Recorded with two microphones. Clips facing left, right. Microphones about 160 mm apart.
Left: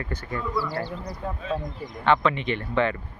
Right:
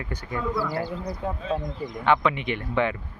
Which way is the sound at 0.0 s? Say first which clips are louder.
Left 1 dB; 10° right (ahead or behind).